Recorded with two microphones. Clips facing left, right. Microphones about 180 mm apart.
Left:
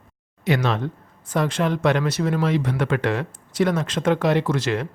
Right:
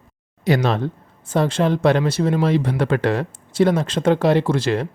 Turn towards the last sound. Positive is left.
turn(degrees=-30)  # may be behind; listen again after turning